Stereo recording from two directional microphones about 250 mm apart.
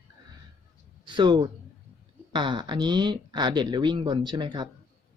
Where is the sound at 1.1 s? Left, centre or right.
Centre.